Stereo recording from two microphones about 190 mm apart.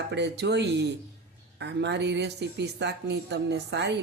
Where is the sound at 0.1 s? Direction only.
65° right (ahead or behind).